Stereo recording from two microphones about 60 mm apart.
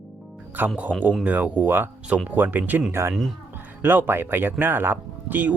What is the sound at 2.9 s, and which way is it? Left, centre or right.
Speech, right.